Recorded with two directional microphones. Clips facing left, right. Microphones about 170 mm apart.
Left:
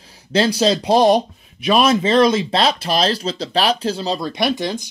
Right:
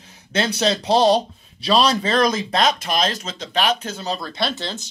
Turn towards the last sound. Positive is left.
turn(degrees=15)  # may be behind; listen again after turning